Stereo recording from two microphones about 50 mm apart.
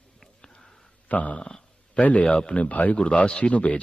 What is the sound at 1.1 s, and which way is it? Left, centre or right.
Speech, left.